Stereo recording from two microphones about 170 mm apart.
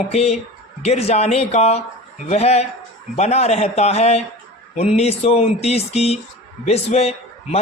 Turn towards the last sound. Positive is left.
turn(degrees=40)  # may be behind; listen again after turning